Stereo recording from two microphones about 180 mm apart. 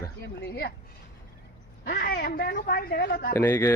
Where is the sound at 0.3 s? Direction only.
70° left (ahead or behind).